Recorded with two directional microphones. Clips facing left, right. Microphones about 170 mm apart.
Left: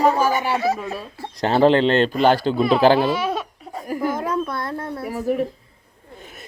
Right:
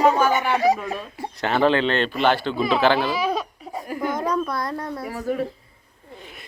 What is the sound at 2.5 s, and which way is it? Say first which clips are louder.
Speech: left 4 dB; centre (ahead or behind).